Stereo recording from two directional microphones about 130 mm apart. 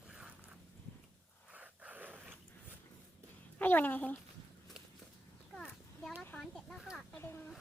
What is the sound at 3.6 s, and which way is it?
Speech, 15° left (ahead or behind).